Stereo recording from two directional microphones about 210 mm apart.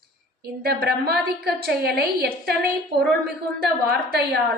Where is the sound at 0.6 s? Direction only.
45° right (ahead or behind).